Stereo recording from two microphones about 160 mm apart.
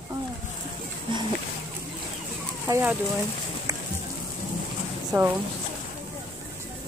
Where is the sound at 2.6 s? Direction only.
15° right (ahead or behind).